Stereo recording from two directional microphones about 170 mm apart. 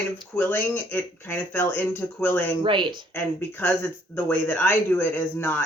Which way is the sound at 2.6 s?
30° right (ahead or behind).